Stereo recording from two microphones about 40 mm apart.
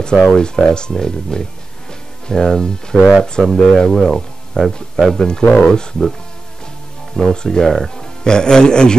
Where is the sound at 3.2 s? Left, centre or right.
Centre.